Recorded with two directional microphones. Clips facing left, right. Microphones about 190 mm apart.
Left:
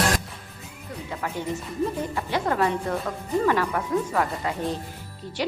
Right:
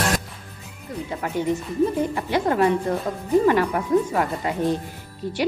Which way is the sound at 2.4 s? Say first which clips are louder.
Right 4 dB; 25° right (ahead or behind).